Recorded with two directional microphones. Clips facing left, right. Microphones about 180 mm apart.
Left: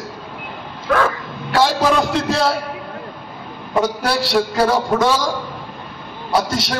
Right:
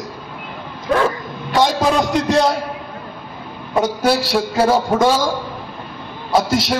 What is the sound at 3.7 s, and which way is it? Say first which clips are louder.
A man's voice: right 2 dB; 20° right (ahead or behind).